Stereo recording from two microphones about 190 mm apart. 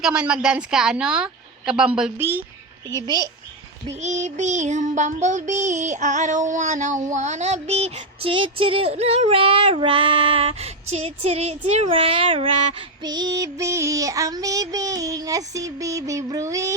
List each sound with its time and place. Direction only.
0.0 s a woman's voice: 5° right (ahead or behind)
3.8 s child singing: 35° right (ahead or behind); by 16.7 s 15° right (ahead or behind)